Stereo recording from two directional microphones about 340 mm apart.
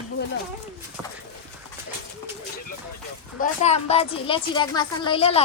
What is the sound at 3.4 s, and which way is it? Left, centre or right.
A woman's voice, centre.